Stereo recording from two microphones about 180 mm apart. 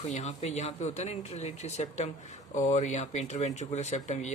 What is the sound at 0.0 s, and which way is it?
Speech, 35° left (ahead or behind).